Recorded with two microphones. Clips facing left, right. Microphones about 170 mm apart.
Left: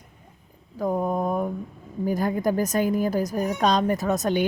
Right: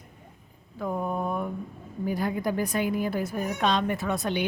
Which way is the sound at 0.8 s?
40° left (ahead or behind).